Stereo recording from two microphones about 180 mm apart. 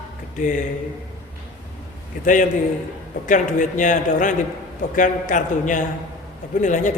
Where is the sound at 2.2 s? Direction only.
45° left (ahead or behind).